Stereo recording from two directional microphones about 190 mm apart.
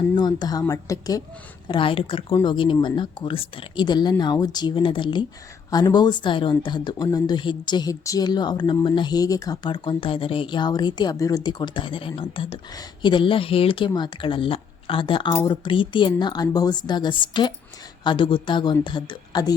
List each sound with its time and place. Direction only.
0.2 s speech: 20° left (ahead or behind)